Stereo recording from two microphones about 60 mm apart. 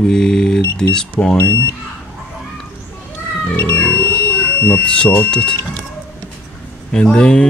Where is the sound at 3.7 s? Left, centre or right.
Left.